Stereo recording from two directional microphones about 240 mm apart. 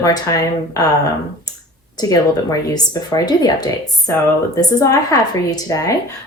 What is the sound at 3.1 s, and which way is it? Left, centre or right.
A woman's voice, centre.